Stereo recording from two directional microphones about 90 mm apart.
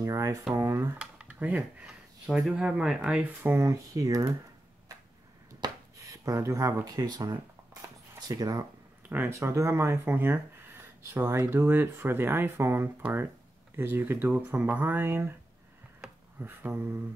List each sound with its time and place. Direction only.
0.0 s speech: 35° right (ahead or behind)
0.9 s speech: 15° right (ahead or behind)
1.9 s speech: 5° right (ahead or behind)
3.4 s speech: 25° right (ahead or behind)
3.9 s speech: 40° right (ahead or behind)
5.6 s a sound: 35° right (ahead or behind)
8.3 s speech: 45° right (ahead or behind)
9.1 s speech: 20° right (ahead or behind)
9.4 s speech: 35° right (ahead or behind)
16.3 s speech: 20° right (ahead or behind)